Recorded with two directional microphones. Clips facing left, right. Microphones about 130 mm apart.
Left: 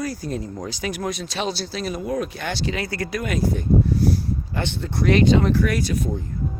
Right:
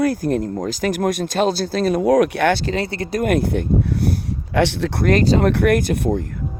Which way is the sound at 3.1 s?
55° right (ahead or behind).